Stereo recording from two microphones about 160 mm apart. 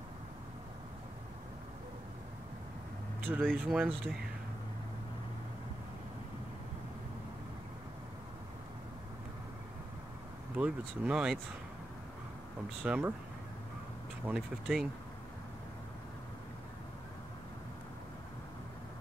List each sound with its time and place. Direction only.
3.3 s speech: 5° right (ahead or behind)
10.5 s speech: 5° right (ahead or behind)
12.8 s speech: 5° right (ahead or behind)
14.2 s speech: 5° right (ahead or behind)